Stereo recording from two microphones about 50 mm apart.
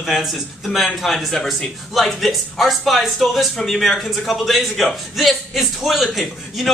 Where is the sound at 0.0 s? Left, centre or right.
Centre.